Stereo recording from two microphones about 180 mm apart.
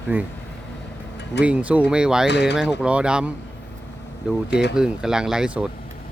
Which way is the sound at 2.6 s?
5° right (ahead or behind).